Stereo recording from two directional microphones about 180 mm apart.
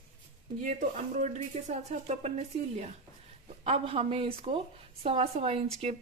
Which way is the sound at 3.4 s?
35° right (ahead or behind).